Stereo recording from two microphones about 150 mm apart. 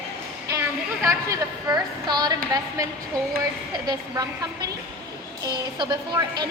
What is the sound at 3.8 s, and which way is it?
A woman's voice, 25° right (ahead or behind).